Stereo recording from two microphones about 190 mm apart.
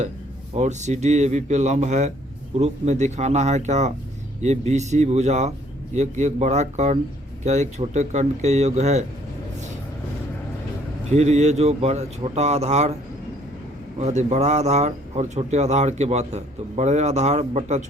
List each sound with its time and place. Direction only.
0.5 s speech: 40° right (ahead or behind)
11.1 s speech: 35° right (ahead or behind)
14.0 s speech: 35° right (ahead or behind)